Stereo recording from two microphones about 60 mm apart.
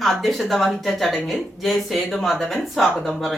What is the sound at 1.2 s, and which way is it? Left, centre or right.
Speech, centre.